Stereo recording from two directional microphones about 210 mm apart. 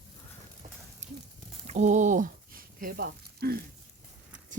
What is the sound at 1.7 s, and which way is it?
Speech, 35° right (ahead or behind).